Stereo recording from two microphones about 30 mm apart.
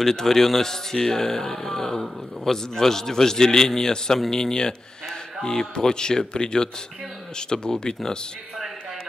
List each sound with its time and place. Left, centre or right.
0.0 s a man's voice: centre